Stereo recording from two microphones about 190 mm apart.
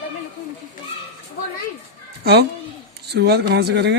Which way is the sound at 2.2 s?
60° right (ahead or behind).